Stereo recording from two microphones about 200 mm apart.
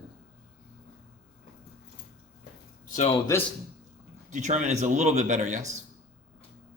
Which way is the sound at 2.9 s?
35° left (ahead or behind).